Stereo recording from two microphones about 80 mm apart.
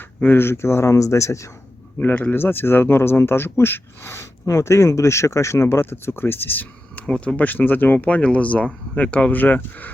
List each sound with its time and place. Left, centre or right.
0.2 s speech: left
2.0 s speech: left